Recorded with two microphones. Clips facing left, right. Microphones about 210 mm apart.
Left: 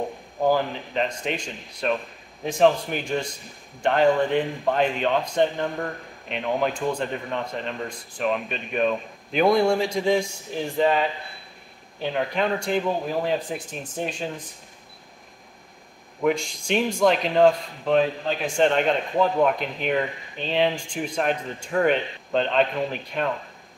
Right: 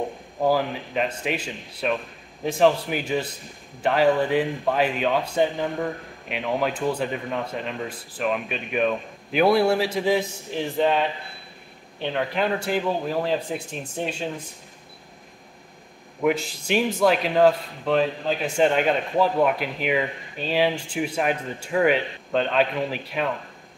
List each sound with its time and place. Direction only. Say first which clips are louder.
0.5 s a man's voice: even; 5° right (ahead or behind)
16.2 s a man's voice: even; 5° right (ahead or behind)